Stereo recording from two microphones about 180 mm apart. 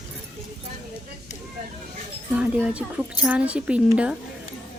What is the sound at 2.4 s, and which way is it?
A woman's voice, 5° right (ahead or behind).